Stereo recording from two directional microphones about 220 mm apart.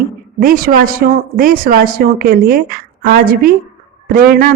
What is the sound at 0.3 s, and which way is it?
Speech, 40° right (ahead or behind).